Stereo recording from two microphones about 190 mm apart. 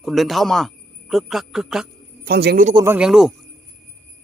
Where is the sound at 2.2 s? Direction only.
60° right (ahead or behind).